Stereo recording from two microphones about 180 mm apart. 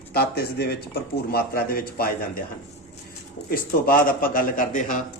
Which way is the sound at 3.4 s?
50° left (ahead or behind).